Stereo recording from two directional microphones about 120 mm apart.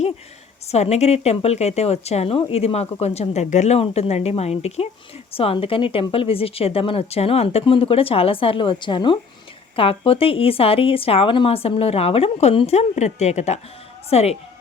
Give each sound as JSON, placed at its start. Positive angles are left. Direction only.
{"t": 0.7, "sound": "a woman's voice", "side_deg": 65}
{"t": 3.8, "sound": "a woman's voice", "side_deg": 55}
{"t": 14.1, "sound": "a woman's voice", "side_deg": 60}